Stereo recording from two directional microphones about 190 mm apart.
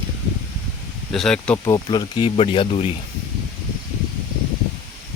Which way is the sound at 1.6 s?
20° left (ahead or behind).